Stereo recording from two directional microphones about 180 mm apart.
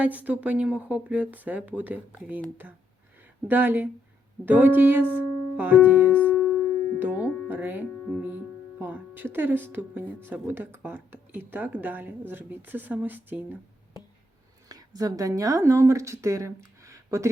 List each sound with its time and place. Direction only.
0.3 s speech: 10° right (ahead or behind)
14.7 s speech: 20° right (ahead or behind)